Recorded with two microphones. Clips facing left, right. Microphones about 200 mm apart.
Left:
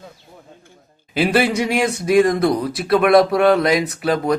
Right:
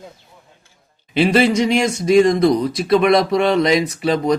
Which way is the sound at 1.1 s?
5° left (ahead or behind).